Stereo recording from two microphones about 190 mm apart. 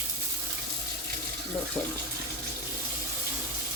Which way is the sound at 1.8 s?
10° left (ahead or behind).